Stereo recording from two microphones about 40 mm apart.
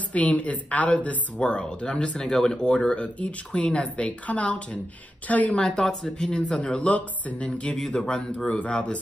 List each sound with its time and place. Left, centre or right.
0.1 s speech: left; by 2.6 s centre
2.6 s a woman's voice: left
5.6 s speech: centre
6.1 s speech: left
8.0 s speech: left